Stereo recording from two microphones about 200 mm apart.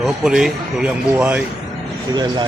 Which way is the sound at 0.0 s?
Centre (ahead or behind).